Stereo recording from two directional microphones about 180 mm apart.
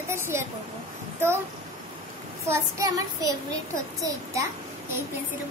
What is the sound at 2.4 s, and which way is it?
Child singing, 20° right (ahead or behind).